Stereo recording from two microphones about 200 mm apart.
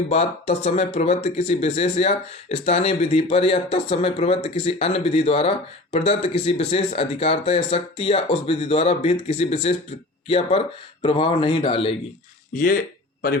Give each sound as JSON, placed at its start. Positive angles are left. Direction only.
{"t": 0.1, "sound": "speech", "side_deg": 30}